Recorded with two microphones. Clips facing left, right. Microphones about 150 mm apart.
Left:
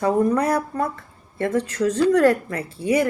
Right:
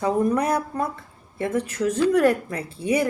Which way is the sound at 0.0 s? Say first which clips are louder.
Left 2 dB; 15° right (ahead or behind).